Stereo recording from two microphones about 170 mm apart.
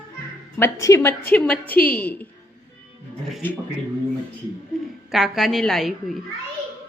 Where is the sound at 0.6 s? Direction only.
15° left (ahead or behind).